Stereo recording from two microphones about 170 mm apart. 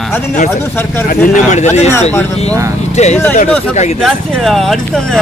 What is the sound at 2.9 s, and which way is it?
Speech, 40° left (ahead or behind).